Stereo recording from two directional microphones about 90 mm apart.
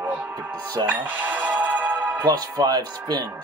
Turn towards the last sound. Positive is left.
turn(degrees=-50)  # may be behind; listen again after turning